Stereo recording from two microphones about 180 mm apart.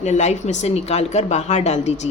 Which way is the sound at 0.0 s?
40° left (ahead or behind).